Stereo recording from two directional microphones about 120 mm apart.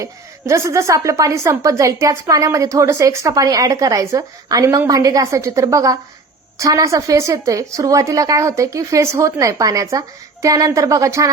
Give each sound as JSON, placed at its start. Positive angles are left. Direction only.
{"t": 0.0, "sound": "a woman's voice", "side_deg": -25}